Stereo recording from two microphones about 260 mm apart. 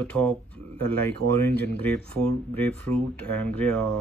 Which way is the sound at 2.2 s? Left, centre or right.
Centre.